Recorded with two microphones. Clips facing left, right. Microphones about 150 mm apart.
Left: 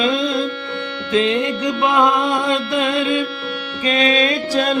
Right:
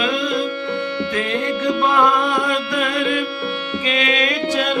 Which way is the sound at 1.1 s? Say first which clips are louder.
Left 8 dB; 20° left (ahead or behind).